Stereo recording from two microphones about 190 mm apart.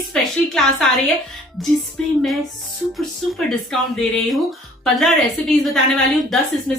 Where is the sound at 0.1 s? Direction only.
Centre (ahead or behind).